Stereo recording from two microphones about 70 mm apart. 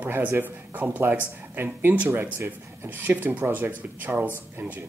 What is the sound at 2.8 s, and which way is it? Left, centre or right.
Speech, right.